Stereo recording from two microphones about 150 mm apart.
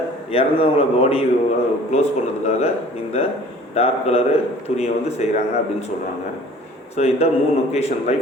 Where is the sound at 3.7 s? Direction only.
40° left (ahead or behind).